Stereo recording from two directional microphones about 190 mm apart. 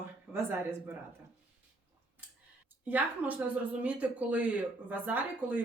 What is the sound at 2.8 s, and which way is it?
A woman's voice, 10° right (ahead or behind).